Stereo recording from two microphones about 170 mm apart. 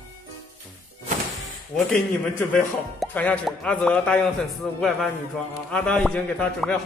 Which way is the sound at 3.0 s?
10° left (ahead or behind).